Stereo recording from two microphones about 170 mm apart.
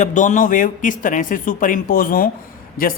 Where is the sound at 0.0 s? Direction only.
45° left (ahead or behind).